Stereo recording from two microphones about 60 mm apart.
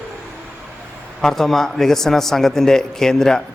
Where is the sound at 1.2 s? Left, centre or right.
Centre.